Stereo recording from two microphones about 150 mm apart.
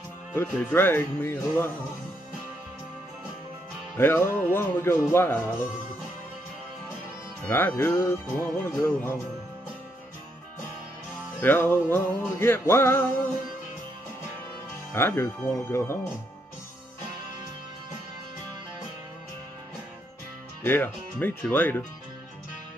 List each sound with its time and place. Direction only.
0.3 s speech: 15° left (ahead or behind)
3.9 s speech: 15° left (ahead or behind)
7.4 s speech: 15° left (ahead or behind)
11.3 s speech: 15° left (ahead or behind)
15.0 s speech: 15° left (ahead or behind)
20.6 s speech: 15° left (ahead or behind)